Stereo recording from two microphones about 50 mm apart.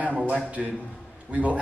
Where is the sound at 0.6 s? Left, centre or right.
Centre.